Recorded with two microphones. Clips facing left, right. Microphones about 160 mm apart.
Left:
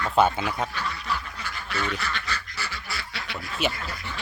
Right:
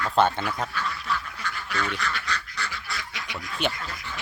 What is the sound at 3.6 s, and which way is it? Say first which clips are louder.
Speech: left 1 dB; 5° left (ahead or behind).